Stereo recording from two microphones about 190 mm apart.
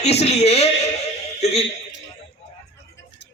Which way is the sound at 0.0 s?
35° left (ahead or behind).